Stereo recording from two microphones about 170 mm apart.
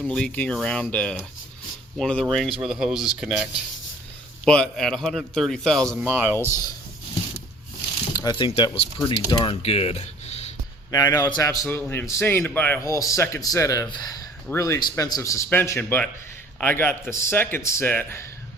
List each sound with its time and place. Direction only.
0.0 s speech: 5° left (ahead or behind)
6.0 s speech: 10° right (ahead or behind)
8.1 s speech: 25° left (ahead or behind); by 10.5 s 40° left (ahead or behind)
10.9 s a man's voice: 20° left (ahead or behind)